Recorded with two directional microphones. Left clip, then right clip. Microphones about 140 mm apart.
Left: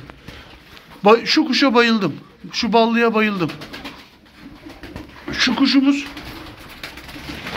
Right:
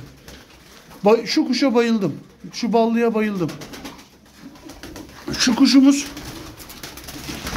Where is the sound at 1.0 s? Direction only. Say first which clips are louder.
Left 3 dB; 10° right (ahead or behind).